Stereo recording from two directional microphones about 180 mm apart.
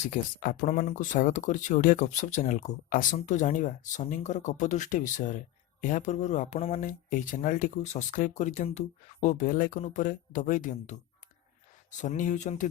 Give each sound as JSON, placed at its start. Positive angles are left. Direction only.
{"t": 0.0, "sound": "speech", "side_deg": 45}